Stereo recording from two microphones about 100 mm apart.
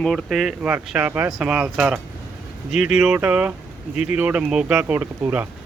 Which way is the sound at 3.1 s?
15° right (ahead or behind).